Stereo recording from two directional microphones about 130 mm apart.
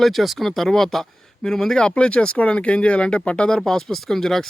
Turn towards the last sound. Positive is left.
turn(degrees=5)  # may be behind; listen again after turning